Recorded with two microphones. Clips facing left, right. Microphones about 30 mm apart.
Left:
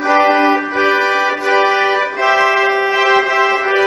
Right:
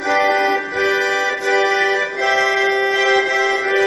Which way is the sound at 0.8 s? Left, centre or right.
Centre.